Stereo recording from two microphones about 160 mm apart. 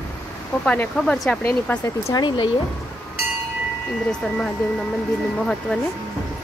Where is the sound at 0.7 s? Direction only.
5° left (ahead or behind).